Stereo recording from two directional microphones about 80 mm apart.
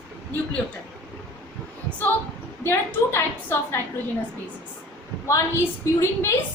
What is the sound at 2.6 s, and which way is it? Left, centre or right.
A woman's voice, left.